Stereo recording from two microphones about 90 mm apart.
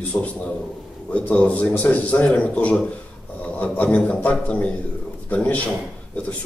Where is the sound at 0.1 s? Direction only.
15° left (ahead or behind).